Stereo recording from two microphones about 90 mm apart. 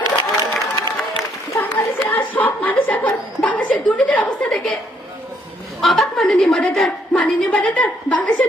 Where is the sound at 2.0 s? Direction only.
20° left (ahead or behind).